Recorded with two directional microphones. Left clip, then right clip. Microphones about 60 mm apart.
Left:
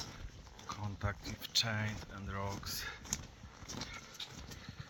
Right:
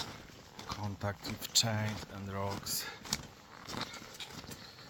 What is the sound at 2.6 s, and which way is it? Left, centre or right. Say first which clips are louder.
Speech: right 3 dB; right.